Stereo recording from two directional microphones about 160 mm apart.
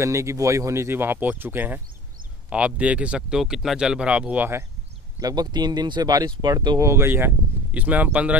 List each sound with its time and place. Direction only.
0.0 s speech: 20° right (ahead or behind)
5.2 s speech: 25° right (ahead or behind); by 8.4 s 10° right (ahead or behind)